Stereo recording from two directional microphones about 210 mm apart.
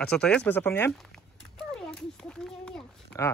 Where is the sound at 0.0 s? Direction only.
5° left (ahead or behind).